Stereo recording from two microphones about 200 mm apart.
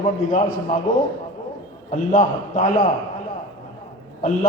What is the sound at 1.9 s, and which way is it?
A man's voice, 40° left (ahead or behind).